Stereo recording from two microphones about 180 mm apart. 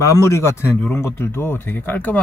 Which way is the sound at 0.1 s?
15° left (ahead or behind).